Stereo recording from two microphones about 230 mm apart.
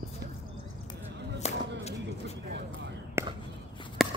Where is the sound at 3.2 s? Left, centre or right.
Centre.